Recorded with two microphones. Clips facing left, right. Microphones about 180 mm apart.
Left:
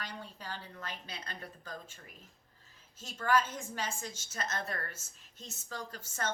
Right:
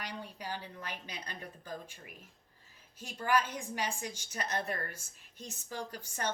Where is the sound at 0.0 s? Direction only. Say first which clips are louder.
Right 2 dB; 15° right (ahead or behind).